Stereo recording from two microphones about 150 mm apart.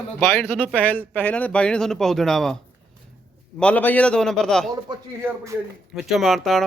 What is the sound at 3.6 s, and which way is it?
Speech, 10° left (ahead or behind).